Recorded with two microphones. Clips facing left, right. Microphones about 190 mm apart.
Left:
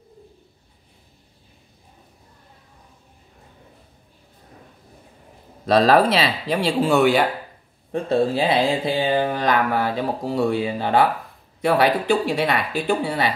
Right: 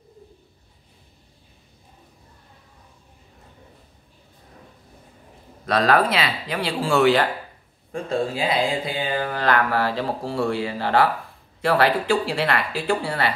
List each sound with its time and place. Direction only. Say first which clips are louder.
5.7 s speech: left 4 dB; 30° left (ahead or behind)
7.9 s speech: left 5 dB; 30° left (ahead or behind)